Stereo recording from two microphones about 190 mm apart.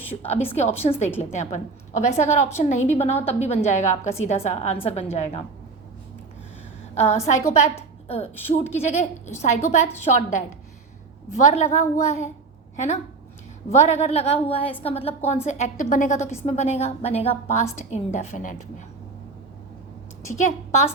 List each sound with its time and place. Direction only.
0.2 s a woman's voice: 35° left (ahead or behind)
6.9 s a woman's voice: 35° left (ahead or behind)
20.4 s a woman's voice: 35° left (ahead or behind)